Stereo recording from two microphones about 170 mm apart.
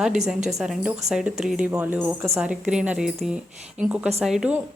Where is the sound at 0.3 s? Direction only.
45° right (ahead or behind).